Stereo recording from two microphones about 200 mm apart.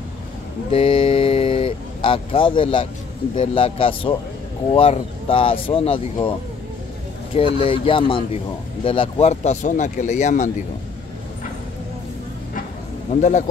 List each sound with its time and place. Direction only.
0.7 s a sound: 25° left (ahead or behind)
3.3 s speech: 25° left (ahead or behind)
7.5 s speech: 25° left (ahead or behind)
13.1 s speech: 35° left (ahead or behind)